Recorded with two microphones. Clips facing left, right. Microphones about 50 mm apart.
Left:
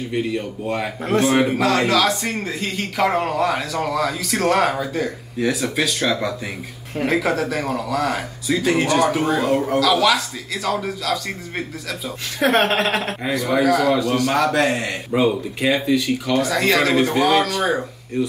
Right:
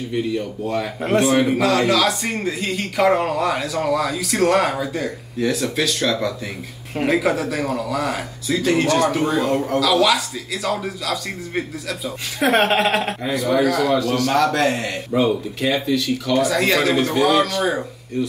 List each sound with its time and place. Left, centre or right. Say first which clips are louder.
0.1 s speech: right 1 dB; centre
1.0 s speech: even; centre
15.2 s speech: left 1 dB; centre
16.3 s speech: even; centre